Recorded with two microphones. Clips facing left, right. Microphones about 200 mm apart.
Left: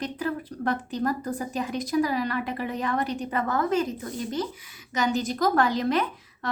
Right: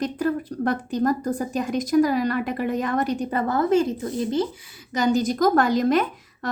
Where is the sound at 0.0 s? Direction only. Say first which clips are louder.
Right 6 dB; 45° right (ahead or behind); by 4.4 s 30° right (ahead or behind).